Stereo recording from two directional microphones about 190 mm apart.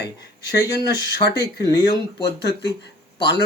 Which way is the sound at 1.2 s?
60° left (ahead or behind).